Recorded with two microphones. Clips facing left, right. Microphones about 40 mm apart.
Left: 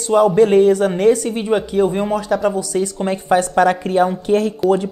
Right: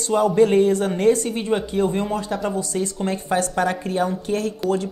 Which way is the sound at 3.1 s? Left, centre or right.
Left.